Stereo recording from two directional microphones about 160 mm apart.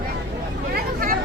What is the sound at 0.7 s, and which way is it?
Vehicle, 65° right (ahead or behind).